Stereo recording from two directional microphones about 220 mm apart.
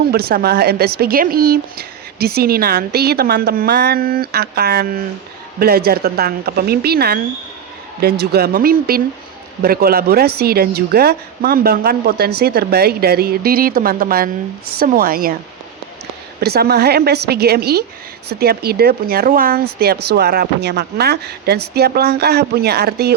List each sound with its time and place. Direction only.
0.1 s speech: 45° right (ahead or behind)
16.4 s speech: 45° right (ahead or behind)